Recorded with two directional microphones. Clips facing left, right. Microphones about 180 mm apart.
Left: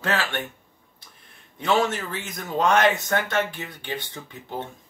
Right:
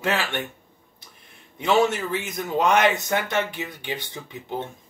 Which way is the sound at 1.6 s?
15° right (ahead or behind).